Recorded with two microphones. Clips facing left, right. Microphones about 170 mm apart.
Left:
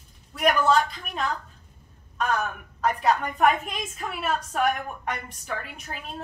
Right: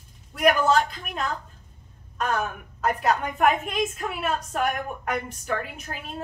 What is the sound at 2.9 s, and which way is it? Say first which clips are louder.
A woman's voice: even; 10° right (ahead or behind).